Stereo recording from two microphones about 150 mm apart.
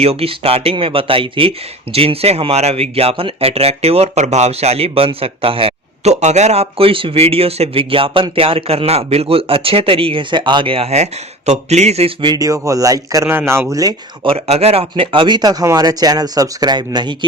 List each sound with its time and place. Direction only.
0.0 s speech: 40° right (ahead or behind); by 13.9 s 20° right (ahead or behind)
14.3 s speech: 45° right (ahead or behind)